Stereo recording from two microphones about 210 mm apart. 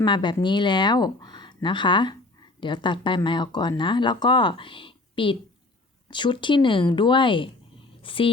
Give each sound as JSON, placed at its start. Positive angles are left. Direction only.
{"t": 0.0, "sound": "speech", "side_deg": 20}